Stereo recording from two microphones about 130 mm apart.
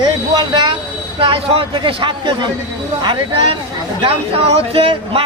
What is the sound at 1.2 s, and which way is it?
Speech, 40° right (ahead or behind).